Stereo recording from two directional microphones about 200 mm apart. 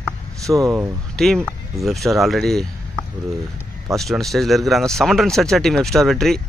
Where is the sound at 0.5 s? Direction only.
15° right (ahead or behind).